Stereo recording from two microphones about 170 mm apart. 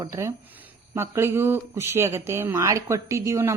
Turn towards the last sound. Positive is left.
turn(degrees=-15)  # may be behind; listen again after turning